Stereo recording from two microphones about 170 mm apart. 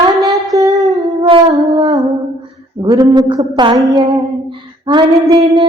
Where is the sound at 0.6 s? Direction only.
20° right (ahead or behind).